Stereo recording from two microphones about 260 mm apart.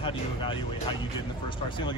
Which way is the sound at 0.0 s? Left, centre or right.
Centre.